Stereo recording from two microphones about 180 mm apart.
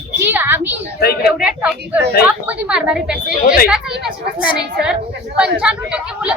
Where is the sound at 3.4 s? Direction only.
50° left (ahead or behind).